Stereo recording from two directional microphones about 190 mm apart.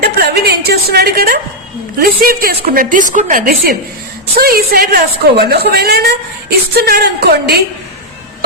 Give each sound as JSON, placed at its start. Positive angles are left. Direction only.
{"t": 0.0, "sound": "a woman's voice", "side_deg": -55}